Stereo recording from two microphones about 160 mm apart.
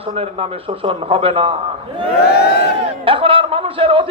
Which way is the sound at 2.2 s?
90° left.